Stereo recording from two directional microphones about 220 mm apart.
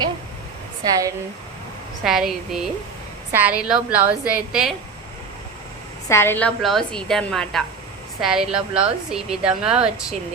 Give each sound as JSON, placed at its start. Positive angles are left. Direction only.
{"t": 0.8, "sound": "speech", "side_deg": -20}
{"t": 2.0, "sound": "a woman's voice", "side_deg": 0}
{"t": 6.1, "sound": "a woman's voice", "side_deg": 10}